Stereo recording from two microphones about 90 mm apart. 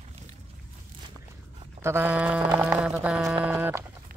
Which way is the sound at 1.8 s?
30° right (ahead or behind).